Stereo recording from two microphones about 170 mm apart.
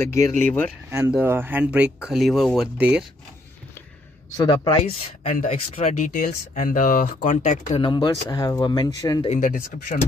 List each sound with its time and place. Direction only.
0.0 s speech: 15° left (ahead or behind)
0.8 s speech: 15° right (ahead or behind)
4.4 s speech: 25° left (ahead or behind)
5.2 s speech: 45° left (ahead or behind)
7.8 s speech: 25° left (ahead or behind)
9.3 s speech: 50° left (ahead or behind)